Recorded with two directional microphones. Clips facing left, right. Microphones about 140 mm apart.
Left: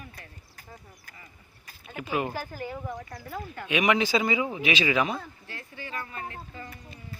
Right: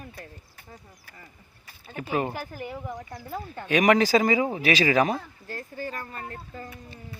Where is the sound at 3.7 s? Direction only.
40° right (ahead or behind).